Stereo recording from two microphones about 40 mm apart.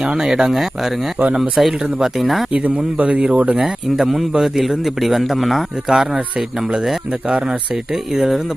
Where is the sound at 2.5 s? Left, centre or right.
Right.